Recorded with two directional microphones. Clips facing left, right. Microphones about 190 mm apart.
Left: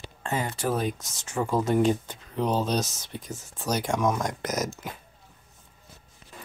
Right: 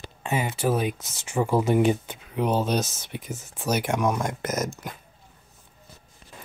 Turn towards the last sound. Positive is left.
turn(degrees=0)  # may be behind; listen again after turning